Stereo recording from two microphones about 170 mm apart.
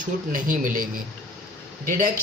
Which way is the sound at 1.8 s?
55° right (ahead or behind).